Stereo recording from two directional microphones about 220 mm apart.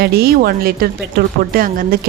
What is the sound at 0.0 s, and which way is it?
Speech, 45° right (ahead or behind).